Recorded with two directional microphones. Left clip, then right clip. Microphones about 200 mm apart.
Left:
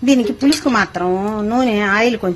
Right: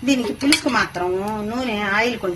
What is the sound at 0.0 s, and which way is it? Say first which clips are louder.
Speech: left 6 dB; 50° left (ahead or behind).